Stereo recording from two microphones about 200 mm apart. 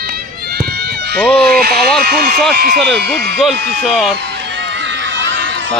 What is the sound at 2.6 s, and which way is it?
Speech, 55° right (ahead or behind).